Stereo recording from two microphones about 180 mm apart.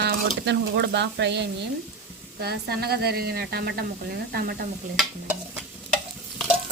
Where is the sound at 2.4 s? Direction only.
60° right (ahead or behind).